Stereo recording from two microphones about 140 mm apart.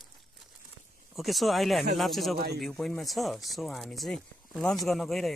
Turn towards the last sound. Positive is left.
turn(degrees=0)  # may be behind; listen again after turning